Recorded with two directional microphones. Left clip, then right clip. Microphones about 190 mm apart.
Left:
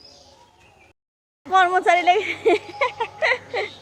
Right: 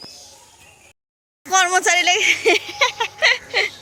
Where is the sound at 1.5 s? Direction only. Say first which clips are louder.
Even; 10° right (ahead or behind).